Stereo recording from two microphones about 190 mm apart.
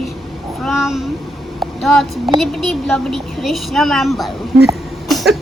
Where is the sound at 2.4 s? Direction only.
Centre (ahead or behind).